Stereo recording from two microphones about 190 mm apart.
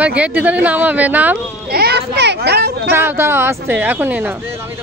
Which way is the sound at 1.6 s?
55° right (ahead or behind).